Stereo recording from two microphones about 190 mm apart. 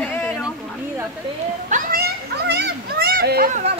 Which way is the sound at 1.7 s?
50° right (ahead or behind).